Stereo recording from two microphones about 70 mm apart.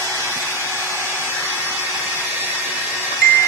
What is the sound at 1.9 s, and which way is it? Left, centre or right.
Vacuum cleaner, left.